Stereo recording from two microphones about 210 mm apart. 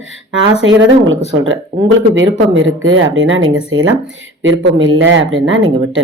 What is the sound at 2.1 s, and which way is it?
Speech, 65° right (ahead or behind).